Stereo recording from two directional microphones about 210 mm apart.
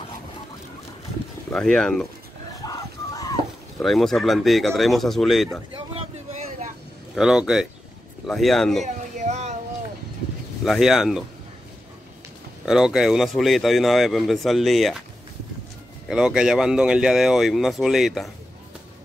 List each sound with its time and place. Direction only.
1.5 s speech: 5° left (ahead or behind)
2.6 s a sound: 20° left (ahead or behind)
3.8 s speech: centre (ahead or behind)
5.7 s a sound: 25° right (ahead or behind)
7.2 s speech: 5° right (ahead or behind)
8.8 s a sound: 35° right (ahead or behind)
10.6 s speech: centre (ahead or behind)
12.6 s speech: centre (ahead or behind)
16.1 s speech: 5° right (ahead or behind)